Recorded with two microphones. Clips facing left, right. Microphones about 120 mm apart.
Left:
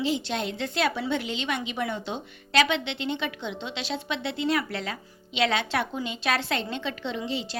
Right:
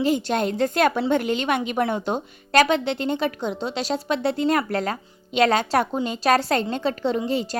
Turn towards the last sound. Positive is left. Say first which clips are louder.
# right 8 dB
turn(degrees=-45)  # may be behind; listen again after turning